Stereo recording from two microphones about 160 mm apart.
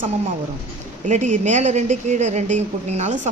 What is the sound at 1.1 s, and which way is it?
A woman's voice, 50° right (ahead or behind).